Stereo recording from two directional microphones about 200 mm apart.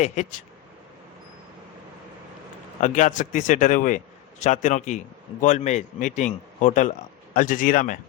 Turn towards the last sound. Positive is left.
turn(degrees=45)  # may be behind; listen again after turning